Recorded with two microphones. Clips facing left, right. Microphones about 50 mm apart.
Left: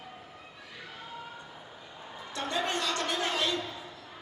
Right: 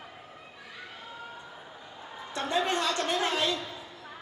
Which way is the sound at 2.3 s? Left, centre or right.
Right.